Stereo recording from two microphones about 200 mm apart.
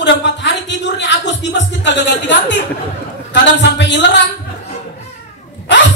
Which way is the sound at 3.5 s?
60° left (ahead or behind).